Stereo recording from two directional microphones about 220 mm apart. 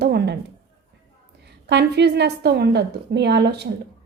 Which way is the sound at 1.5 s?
50° right (ahead or behind).